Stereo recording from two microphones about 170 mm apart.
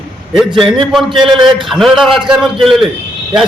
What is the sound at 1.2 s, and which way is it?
Speech, 30° right (ahead or behind).